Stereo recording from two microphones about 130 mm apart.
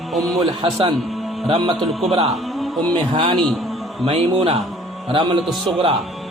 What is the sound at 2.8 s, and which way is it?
Speech, 30° right (ahead or behind).